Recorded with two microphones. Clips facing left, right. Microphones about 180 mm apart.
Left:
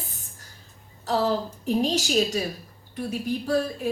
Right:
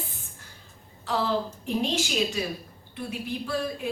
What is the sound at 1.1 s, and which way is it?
A woman's voice, 40° left (ahead or behind).